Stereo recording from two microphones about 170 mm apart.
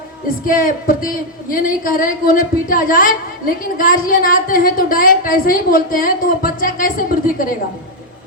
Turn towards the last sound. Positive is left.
turn(degrees=55)  # may be behind; listen again after turning